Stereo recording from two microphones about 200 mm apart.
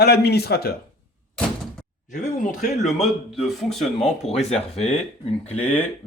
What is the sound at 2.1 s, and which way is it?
Speech, 40° left (ahead or behind).